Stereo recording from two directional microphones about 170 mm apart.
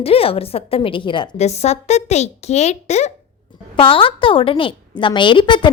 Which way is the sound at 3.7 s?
30° left (ahead or behind).